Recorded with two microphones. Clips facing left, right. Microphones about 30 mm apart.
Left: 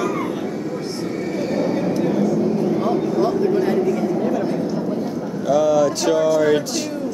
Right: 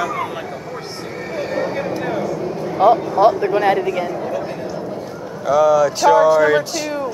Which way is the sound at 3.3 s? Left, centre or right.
Right.